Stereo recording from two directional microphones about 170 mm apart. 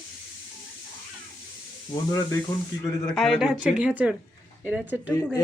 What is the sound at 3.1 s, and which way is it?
Speech, centre (ahead or behind).